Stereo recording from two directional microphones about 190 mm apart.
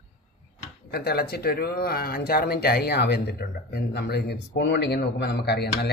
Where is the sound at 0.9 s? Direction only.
55° left (ahead or behind).